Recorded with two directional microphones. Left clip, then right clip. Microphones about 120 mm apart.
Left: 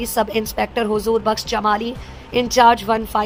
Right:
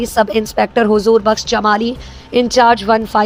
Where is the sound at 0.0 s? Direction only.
35° right (ahead or behind).